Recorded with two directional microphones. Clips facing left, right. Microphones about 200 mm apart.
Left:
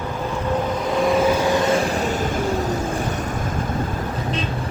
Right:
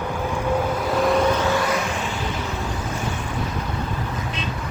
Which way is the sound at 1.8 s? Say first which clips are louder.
Left 5 dB; 40° left (ahead or behind).